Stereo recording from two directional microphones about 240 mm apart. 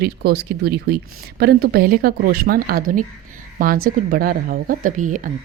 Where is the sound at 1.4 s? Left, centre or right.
Right.